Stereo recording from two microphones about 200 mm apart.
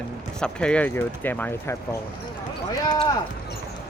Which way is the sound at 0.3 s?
5° left (ahead or behind).